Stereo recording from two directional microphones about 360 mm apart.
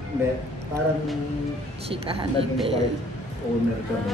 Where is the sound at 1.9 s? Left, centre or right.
Centre.